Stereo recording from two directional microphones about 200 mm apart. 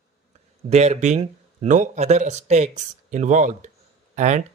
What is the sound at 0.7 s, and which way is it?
Speech, 35° right (ahead or behind).